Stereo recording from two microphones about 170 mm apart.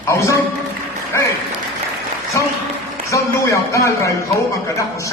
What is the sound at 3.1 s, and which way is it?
A man's voice, 20° left (ahead or behind).